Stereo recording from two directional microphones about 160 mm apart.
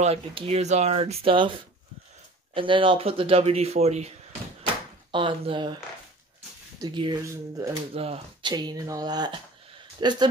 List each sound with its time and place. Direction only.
0.0 s speech: 35° right (ahead or behind)
5.1 s speech: 30° right (ahead or behind)
6.8 s speech: 30° right (ahead or behind)
7.9 s speech: 35° right (ahead or behind)